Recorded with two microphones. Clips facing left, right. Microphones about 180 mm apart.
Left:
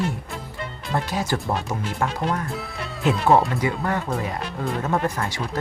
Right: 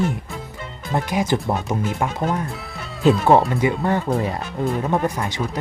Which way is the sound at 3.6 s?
25° right (ahead or behind).